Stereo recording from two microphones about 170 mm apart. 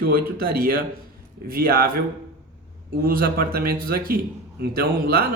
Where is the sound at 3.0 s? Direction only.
60° right (ahead or behind).